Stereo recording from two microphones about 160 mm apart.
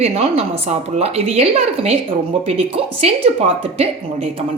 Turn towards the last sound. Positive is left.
turn(degrees=-35)  # may be behind; listen again after turning